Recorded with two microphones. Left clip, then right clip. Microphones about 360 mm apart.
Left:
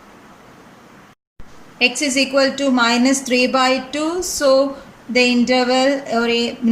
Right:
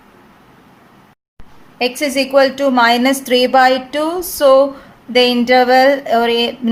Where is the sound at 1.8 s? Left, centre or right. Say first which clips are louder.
Even; centre.